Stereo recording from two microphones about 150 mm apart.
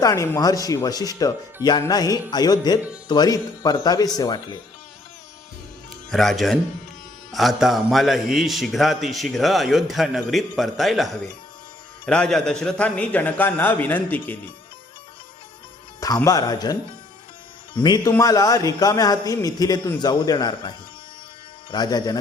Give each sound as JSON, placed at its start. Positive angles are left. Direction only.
{"t": 0.0, "sound": "a man's voice", "side_deg": 20}
{"t": 6.1, "sound": "a man's voice", "side_deg": 0}
{"t": 16.0, "sound": "speech", "side_deg": 25}
{"t": 17.7, "sound": "a man's voice", "side_deg": 30}